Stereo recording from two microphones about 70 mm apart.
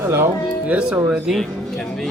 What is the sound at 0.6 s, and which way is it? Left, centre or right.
Speech, centre.